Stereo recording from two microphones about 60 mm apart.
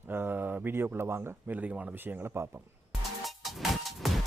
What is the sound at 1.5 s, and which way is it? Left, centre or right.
Speech, right.